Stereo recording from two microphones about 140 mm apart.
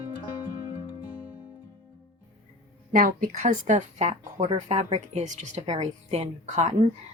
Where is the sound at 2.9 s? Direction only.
70° right (ahead or behind).